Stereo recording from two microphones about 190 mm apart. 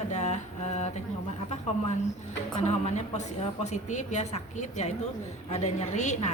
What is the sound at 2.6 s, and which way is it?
A woman's voice, 35° left (ahead or behind).